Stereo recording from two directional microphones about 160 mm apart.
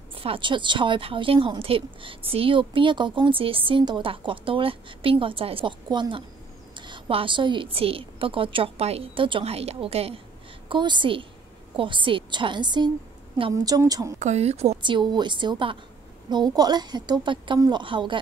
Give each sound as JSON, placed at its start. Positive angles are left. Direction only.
{"t": 0.1, "sound": "a woman's voice", "side_deg": -35}
{"t": 14.2, "sound": "a woman's voice", "side_deg": -45}
{"t": 14.8, "sound": "a woman's voice", "side_deg": -30}